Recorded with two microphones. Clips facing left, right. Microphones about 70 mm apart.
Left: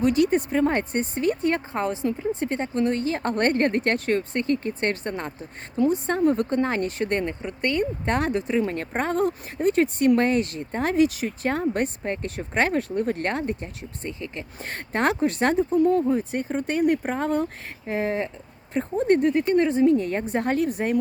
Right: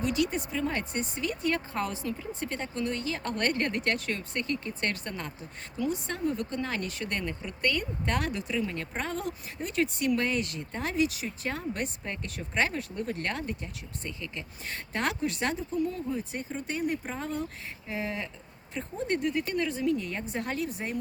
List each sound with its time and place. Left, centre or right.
0.0 s speech: left
14.6 s speech: left